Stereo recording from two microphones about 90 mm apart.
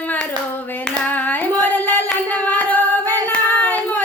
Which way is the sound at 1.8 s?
15° left (ahead or behind).